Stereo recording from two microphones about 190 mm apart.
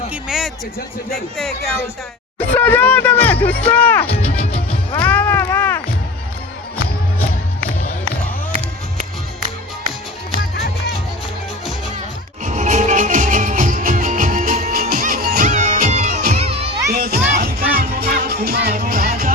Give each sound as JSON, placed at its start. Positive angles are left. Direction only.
{"t": 0.1, "sound": "a sound", "side_deg": 0}
{"t": 1.4, "sound": "speech", "side_deg": 0}
{"t": 4.9, "sound": "a sound", "side_deg": 10}
{"t": 12.5, "sound": "music", "side_deg": -40}
{"t": 16.9, "sound": "music", "side_deg": -55}
{"t": 18.7, "sound": "music", "side_deg": -45}